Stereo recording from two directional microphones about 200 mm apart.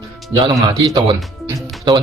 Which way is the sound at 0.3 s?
20° right (ahead or behind).